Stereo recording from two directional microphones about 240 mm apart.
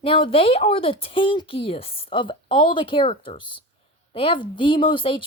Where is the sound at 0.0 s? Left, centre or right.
Left.